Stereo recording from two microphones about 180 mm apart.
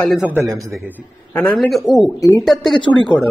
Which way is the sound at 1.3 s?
10° left (ahead or behind).